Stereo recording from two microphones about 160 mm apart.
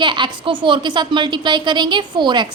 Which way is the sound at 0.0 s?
30° right (ahead or behind).